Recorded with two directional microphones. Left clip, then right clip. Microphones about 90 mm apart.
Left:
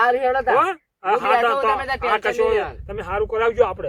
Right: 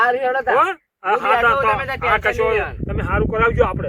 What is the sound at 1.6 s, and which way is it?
Speech, 15° left (ahead or behind).